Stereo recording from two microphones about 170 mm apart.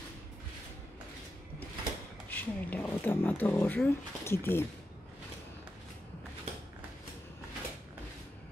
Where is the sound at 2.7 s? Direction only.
10° left (ahead or behind).